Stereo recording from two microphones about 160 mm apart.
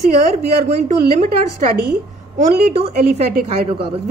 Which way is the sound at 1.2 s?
50° right (ahead or behind).